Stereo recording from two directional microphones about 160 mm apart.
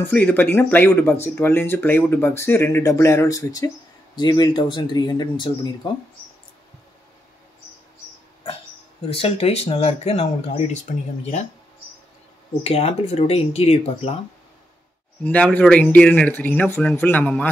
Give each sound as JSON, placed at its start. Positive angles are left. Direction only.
{"t": 0.0, "sound": "speech", "side_deg": 10}
{"t": 9.1, "sound": "speech", "side_deg": 40}
{"t": 12.6, "sound": "speech", "side_deg": 40}
{"t": 15.2, "sound": "speech", "side_deg": 10}